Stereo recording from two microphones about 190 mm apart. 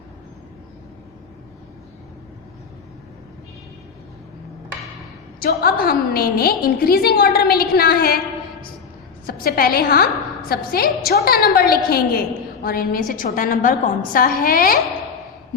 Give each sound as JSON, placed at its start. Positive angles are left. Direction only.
{"t": 5.4, "sound": "a woman's voice", "side_deg": 50}
{"t": 9.2, "sound": "a woman's voice", "side_deg": 50}